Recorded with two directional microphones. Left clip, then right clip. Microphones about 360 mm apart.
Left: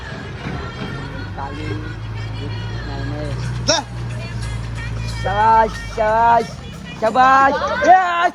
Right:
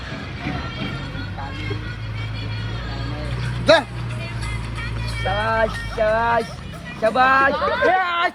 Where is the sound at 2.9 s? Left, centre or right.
Left.